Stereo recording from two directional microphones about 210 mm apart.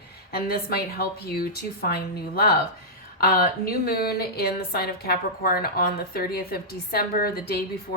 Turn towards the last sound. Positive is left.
turn(degrees=45)  # may be behind; listen again after turning